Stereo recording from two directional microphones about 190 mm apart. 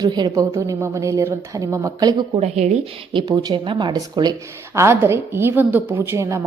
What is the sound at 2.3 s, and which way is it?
A woman's voice, 35° right (ahead or behind).